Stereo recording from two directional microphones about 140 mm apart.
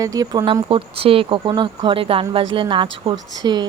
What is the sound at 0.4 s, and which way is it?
Speech, 40° right (ahead or behind).